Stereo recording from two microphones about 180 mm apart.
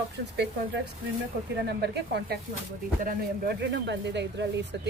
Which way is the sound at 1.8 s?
65° right (ahead or behind).